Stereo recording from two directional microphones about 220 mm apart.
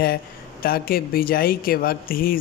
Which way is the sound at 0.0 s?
45° left (ahead or behind).